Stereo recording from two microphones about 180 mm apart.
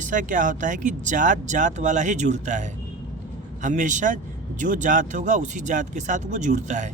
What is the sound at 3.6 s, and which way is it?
Speech, 45° right (ahead or behind).